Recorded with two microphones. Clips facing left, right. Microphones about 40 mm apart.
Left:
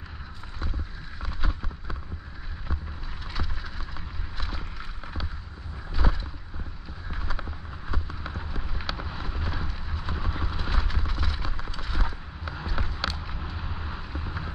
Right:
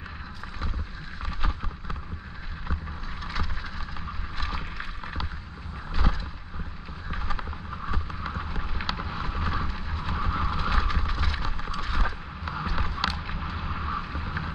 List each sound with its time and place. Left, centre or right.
1.2 s vehicle: right
4.4 s boat: right
7.1 s a sound: right
8.9 s vehicle: right
12.6 s a sound: right
13.4 s vehicle: right